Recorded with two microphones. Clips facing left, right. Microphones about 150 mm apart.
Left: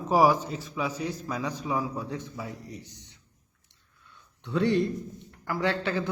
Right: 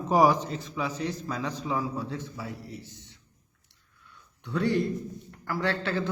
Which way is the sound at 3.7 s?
20° left (ahead or behind).